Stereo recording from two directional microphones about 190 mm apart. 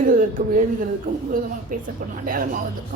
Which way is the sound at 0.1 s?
45° right (ahead or behind).